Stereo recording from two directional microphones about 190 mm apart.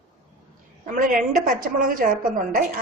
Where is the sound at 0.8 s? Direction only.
45° right (ahead or behind).